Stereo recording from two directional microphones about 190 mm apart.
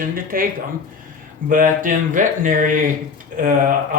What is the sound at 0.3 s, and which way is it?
Speech, 45° right (ahead or behind).